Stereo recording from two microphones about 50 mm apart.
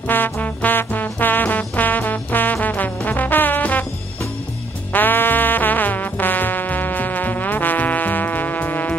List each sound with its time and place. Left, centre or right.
0.1 s music: left
4.9 s music: left